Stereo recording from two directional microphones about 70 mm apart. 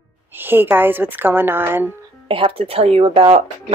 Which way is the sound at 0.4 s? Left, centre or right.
Right.